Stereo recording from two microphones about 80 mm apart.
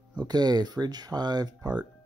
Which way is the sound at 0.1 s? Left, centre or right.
Right.